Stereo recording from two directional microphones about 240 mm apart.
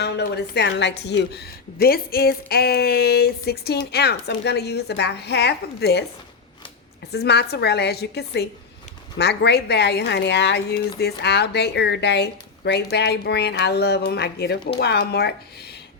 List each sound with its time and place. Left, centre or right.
0.0 s a woman's voice: left
7.1 s speech: left